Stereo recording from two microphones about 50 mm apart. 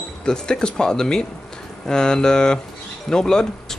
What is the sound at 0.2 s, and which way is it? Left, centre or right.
A man's voice, centre.